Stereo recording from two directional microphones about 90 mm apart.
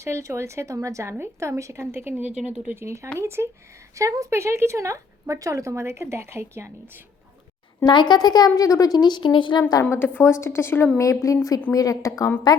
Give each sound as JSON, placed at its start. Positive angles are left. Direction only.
{"t": 0.0, "sound": "speech", "side_deg": -30}
{"t": 2.8, "sound": "speech", "side_deg": -30}
{"t": 7.9, "sound": "speech", "side_deg": 55}
{"t": 10.2, "sound": "a woman's voice", "side_deg": 30}